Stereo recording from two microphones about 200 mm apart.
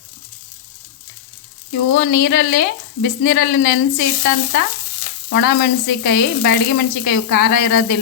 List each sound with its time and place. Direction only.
1.9 s speech: 50° left (ahead or behind)